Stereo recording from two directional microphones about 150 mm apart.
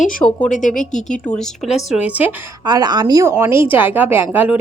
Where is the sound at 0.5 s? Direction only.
60° left (ahead or behind).